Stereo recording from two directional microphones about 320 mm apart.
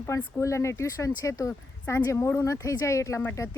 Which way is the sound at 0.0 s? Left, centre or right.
Centre.